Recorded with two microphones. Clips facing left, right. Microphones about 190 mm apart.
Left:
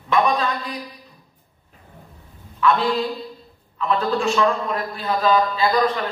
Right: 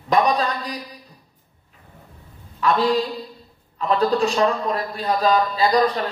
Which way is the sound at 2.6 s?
40° right (ahead or behind).